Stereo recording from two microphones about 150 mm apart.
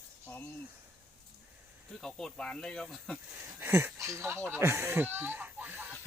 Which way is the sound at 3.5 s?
15° right (ahead or behind).